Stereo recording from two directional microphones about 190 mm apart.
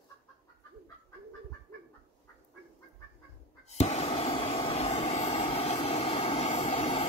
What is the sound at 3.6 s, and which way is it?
Vehicle, 35° left (ahead or behind).